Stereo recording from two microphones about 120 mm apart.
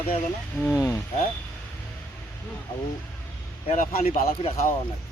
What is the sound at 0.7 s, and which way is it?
Speech, 25° left (ahead or behind).